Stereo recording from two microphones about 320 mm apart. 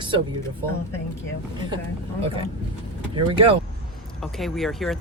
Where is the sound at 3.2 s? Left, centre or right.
Centre.